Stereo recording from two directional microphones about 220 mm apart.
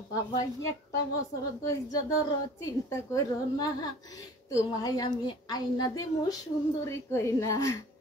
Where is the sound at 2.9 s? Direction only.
15° left (ahead or behind).